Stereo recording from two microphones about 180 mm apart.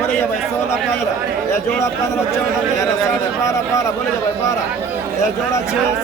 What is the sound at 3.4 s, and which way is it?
Speech, 15° left (ahead or behind).